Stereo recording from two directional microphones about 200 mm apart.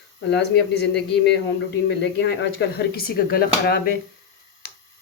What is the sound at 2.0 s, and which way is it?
Speech, 60° left (ahead or behind).